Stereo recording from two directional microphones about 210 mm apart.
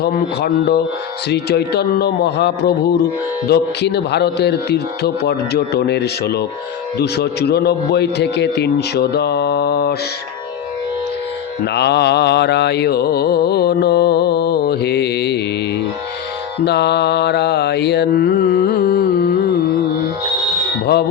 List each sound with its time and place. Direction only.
0.0 s mantra: 50° left (ahead or behind)
11.6 s mantra: 50° left (ahead or behind)
16.6 s mantra: 50° left (ahead or behind)